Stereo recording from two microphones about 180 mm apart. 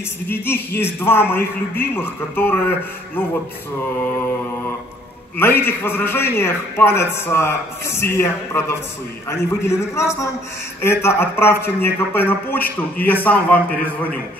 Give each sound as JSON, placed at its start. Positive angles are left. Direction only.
{"t": 0.3, "sound": "a man's voice", "side_deg": 10}
{"t": 5.4, "sound": "a man's voice", "side_deg": 10}